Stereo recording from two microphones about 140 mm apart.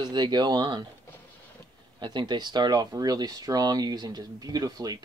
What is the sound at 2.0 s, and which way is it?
Speech, 35° right (ahead or behind).